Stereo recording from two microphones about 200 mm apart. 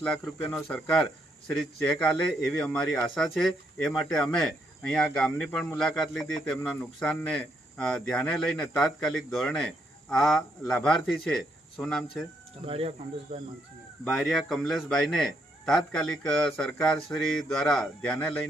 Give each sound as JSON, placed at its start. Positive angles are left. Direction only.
{"t": 0.0, "sound": "a man's voice", "side_deg": 5}
{"t": 12.6, "sound": "speech", "side_deg": -30}
{"t": 14.1, "sound": "a man's voice", "side_deg": 0}